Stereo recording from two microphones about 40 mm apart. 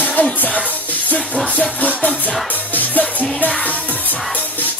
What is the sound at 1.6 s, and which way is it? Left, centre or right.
Music, left.